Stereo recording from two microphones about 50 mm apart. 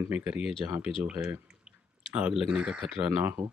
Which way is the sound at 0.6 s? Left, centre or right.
Right.